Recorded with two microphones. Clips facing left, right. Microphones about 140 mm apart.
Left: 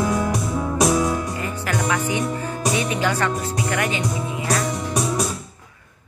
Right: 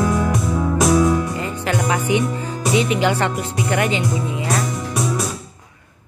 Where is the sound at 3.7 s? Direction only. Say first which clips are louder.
Right 5 dB; 25° right (ahead or behind).